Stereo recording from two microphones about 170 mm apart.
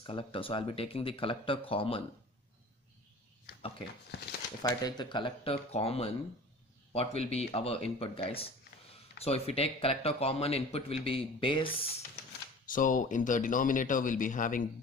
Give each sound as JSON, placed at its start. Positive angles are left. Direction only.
{"t": 0.0, "sound": "speech", "side_deg": 30}
{"t": 4.1, "sound": "speech", "side_deg": 80}
{"t": 4.6, "sound": "speech", "side_deg": 25}
{"t": 12.6, "sound": "speech", "side_deg": 50}